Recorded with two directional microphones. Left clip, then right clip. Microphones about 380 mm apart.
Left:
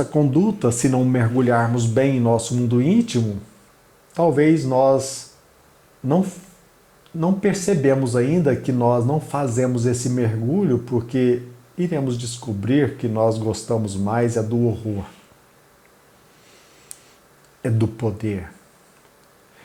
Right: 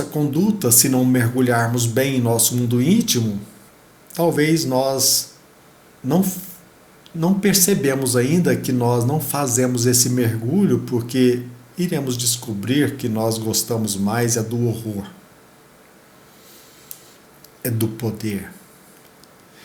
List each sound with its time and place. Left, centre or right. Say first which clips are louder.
0.1 s speech: left 2 dB; left
6.1 s speech: even; centre
17.6 s speech: left 1 dB; left